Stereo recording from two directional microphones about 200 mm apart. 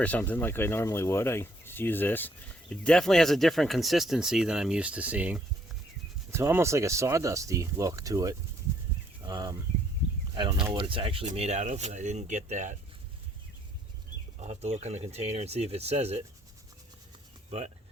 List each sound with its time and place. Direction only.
0.0 s speech: 10° left (ahead or behind); by 9.6 s 15° right (ahead or behind)
10.7 s speech: 25° right (ahead or behind)
14.3 s speech: 35° right (ahead or behind)